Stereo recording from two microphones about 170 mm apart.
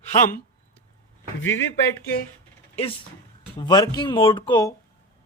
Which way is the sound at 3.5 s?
25° left (ahead or behind).